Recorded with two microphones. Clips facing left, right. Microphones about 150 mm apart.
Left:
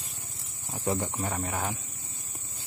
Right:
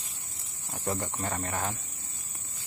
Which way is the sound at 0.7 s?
15° left (ahead or behind).